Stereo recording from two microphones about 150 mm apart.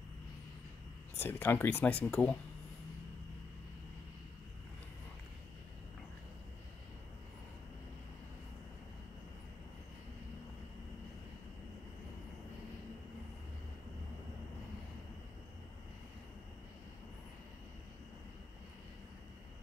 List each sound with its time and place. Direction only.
1.2 s speech: 15° left (ahead or behind)